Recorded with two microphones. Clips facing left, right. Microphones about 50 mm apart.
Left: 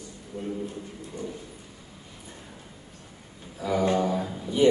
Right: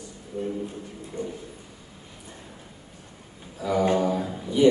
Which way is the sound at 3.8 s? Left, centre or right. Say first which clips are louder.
Right 2 dB; right.